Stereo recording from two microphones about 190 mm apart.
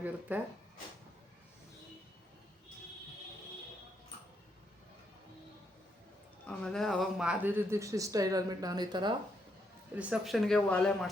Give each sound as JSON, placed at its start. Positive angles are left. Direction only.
{"t": 0.0, "sound": "speech", "side_deg": -10}
{"t": 6.4, "sound": "speech", "side_deg": 5}
{"t": 10.0, "sound": "speech", "side_deg": -5}